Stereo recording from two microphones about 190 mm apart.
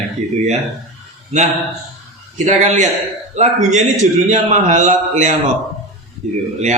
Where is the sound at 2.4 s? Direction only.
40° right (ahead or behind).